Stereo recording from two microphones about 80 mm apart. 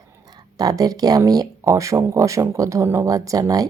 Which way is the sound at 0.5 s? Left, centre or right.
Right.